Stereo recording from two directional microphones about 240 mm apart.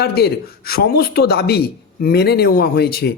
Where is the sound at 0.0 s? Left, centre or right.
Left.